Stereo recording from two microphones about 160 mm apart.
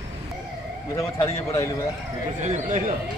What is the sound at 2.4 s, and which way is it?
Speech, 45° right (ahead or behind).